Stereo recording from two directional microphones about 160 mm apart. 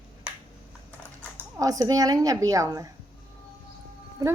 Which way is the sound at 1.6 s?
20° right (ahead or behind).